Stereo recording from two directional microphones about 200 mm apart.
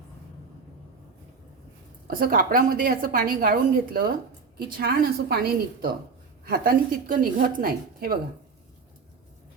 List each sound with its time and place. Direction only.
2.0 s a woman's voice: 45° right (ahead or behind)